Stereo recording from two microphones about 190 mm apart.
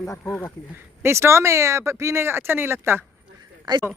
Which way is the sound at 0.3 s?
Centre (ahead or behind).